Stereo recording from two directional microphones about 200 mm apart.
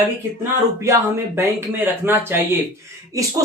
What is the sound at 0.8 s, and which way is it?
Speech, 15° right (ahead or behind).